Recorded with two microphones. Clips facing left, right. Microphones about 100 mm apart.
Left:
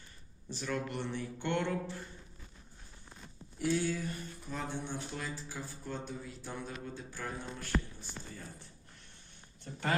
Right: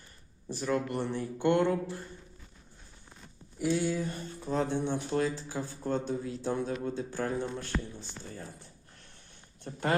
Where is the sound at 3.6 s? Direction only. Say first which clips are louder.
Right 3 dB; 10° right (ahead or behind).